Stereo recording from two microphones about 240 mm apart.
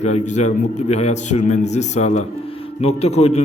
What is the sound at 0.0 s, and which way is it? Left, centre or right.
A man's voice, left.